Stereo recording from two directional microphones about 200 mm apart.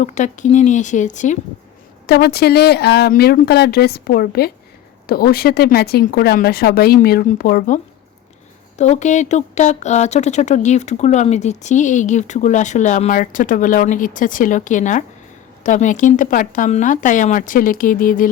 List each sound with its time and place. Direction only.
0.0 s speech: 35° left (ahead or behind)
2.0 s speech: 55° left (ahead or behind)
8.8 s speech: 35° left (ahead or behind)